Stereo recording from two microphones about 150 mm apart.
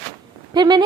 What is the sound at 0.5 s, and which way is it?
Speech, 30° right (ahead or behind).